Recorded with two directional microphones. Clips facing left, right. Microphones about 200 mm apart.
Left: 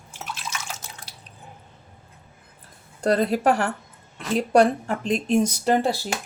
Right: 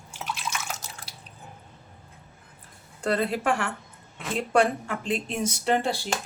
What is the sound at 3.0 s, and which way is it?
Speech, 40° left (ahead or behind).